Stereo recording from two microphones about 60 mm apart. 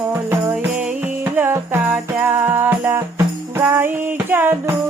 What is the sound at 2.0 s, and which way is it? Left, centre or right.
Music, right.